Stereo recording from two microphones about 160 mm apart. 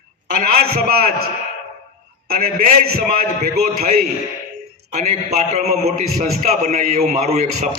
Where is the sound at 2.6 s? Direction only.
65° right (ahead or behind).